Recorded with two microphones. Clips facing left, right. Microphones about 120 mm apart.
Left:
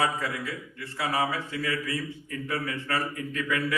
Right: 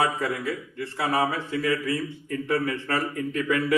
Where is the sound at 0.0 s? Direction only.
30° right (ahead or behind).